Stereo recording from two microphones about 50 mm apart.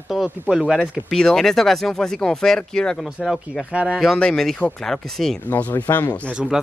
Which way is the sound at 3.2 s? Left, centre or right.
Centre.